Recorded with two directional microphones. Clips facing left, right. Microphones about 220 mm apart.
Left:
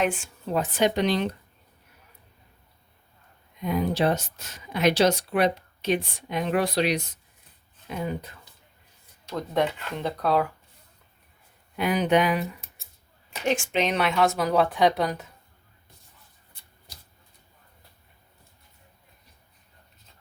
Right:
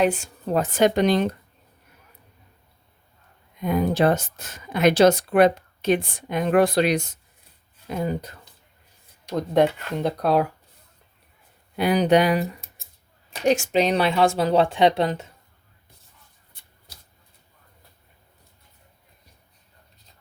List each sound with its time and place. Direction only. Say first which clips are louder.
0.0 s speech: right 5 dB; 40° right (ahead or behind)
3.6 s speech: right 4 dB; 50° right (ahead or behind)
9.6 s speech: right 6 dB; 40° right (ahead or behind)
11.8 s speech: right 4 dB; 35° right (ahead or behind)